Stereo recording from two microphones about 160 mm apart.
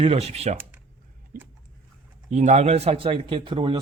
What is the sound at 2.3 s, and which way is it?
Speech, 45° right (ahead or behind).